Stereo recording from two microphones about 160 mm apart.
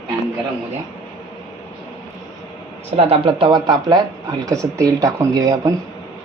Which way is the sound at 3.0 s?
35° right (ahead or behind).